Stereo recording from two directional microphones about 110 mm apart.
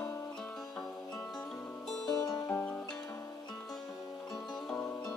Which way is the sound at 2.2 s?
35° left (ahead or behind).